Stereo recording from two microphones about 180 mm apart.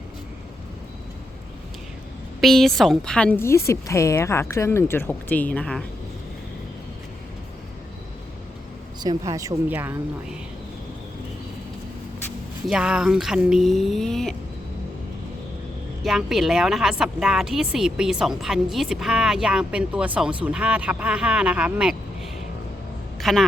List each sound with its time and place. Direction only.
2.4 s a woman's voice: centre (ahead or behind)
9.0 s speech: 20° right (ahead or behind)
12.6 s speech: 5° right (ahead or behind)
16.0 s speech: centre (ahead or behind)
23.2 s speech: centre (ahead or behind)